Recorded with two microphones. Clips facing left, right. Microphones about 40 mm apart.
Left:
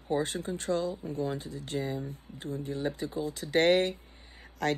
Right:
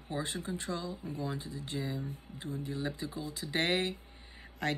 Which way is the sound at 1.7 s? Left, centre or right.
Left.